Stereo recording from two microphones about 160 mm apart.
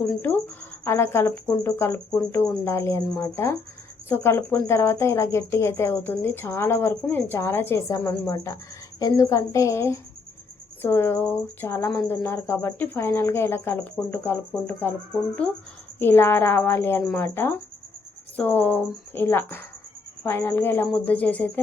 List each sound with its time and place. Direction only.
0.1 s speech: 10° left (ahead or behind)
16.0 s speech: 15° left (ahead or behind)